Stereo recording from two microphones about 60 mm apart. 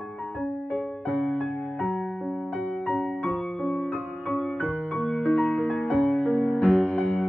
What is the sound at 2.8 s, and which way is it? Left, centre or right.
Music, left.